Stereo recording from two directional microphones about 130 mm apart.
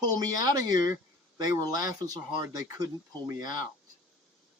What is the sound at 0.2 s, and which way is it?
Speech, 30° right (ahead or behind).